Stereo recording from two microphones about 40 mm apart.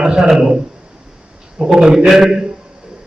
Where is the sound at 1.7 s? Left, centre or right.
Centre.